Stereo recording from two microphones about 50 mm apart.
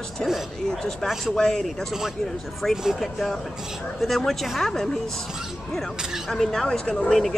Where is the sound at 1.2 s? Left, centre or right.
Centre.